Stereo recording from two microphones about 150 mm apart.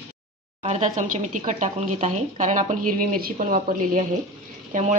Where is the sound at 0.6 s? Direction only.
50° right (ahead or behind).